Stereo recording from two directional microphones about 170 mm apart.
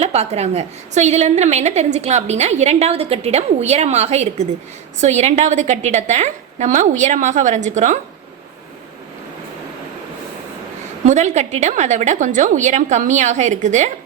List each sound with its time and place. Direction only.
0.0 s a woman's voice: 40° right (ahead or behind)
11.0 s a woman's voice: 45° right (ahead or behind)